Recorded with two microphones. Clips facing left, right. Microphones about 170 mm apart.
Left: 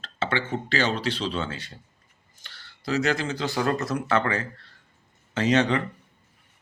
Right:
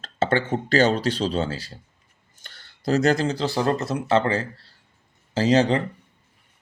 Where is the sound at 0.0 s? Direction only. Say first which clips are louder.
Right 6 dB; 45° right (ahead or behind).